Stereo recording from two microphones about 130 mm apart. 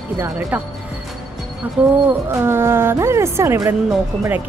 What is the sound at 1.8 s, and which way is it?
A woman's voice, 15° right (ahead or behind).